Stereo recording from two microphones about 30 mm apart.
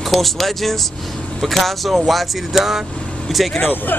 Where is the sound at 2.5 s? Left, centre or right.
Centre.